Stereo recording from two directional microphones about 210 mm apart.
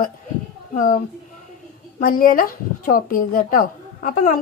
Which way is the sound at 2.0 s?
40° left (ahead or behind).